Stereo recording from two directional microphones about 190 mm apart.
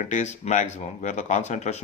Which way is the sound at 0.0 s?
40° left (ahead or behind).